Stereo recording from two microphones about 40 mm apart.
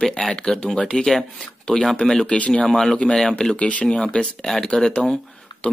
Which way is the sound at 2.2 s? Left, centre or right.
Left.